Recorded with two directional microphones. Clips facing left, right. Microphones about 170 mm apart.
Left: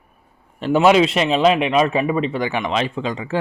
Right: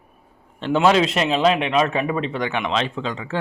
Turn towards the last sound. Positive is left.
turn(degrees=10)  # may be behind; listen again after turning